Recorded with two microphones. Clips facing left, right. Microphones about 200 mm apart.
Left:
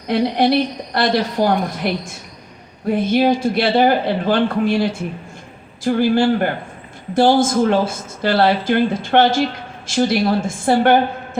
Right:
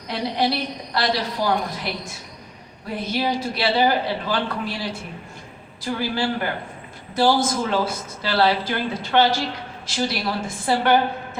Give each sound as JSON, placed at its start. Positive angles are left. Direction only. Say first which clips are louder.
{"t": 0.1, "sound": "speech", "louder": "left 8 dB", "side_deg": 50}